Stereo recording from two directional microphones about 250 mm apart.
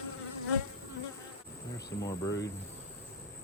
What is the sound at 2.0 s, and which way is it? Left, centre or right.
Speech, centre.